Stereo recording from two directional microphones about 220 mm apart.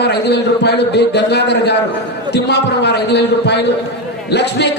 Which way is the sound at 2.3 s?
50° left (ahead or behind).